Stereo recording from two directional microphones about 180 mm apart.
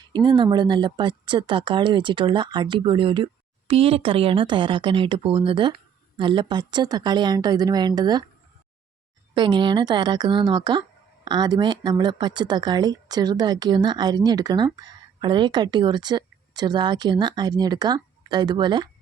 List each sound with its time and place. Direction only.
0.1 s speech: 25° right (ahead or behind)
9.3 s speech: 25° right (ahead or behind)